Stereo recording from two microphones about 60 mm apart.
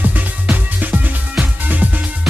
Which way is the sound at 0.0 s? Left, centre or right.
Right.